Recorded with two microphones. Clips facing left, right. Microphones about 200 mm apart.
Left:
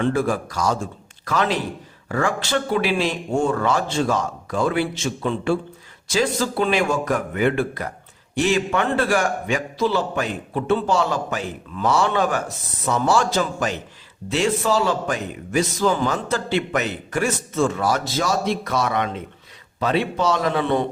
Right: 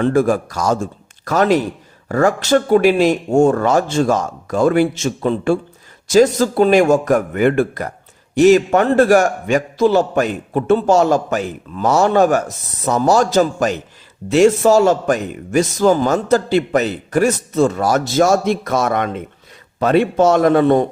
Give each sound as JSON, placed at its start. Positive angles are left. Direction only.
{"t": 0.0, "sound": "a man's voice", "side_deg": -45}